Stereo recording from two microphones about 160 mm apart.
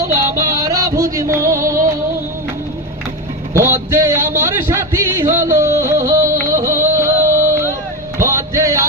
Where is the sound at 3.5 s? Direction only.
15° right (ahead or behind).